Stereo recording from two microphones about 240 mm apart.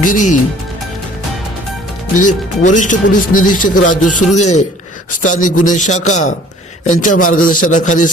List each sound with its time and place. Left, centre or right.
0.0 s a man's voice: left
2.1 s a man's voice: left